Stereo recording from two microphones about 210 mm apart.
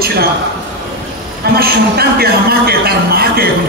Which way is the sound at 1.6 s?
45° right (ahead or behind).